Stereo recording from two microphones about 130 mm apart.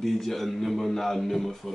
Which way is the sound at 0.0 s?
Centre (ahead or behind).